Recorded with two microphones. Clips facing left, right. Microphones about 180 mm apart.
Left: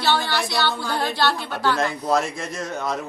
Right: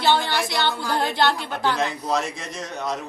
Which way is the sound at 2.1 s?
Centre (ahead or behind).